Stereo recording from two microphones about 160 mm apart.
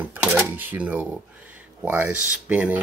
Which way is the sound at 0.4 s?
10° right (ahead or behind).